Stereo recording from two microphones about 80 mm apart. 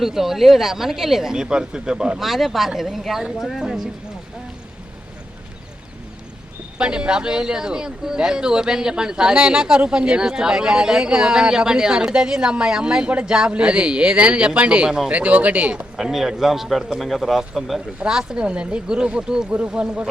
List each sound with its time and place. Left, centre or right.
0.0 s speech: centre
6.7 s speech: centre
16.0 s speech: centre